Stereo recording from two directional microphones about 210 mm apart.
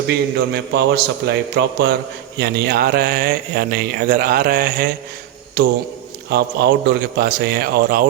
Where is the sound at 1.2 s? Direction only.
50° right (ahead or behind).